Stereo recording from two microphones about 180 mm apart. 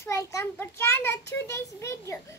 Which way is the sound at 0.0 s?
15° left (ahead or behind).